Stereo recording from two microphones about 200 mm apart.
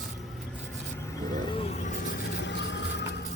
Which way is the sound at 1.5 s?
30° left (ahead or behind).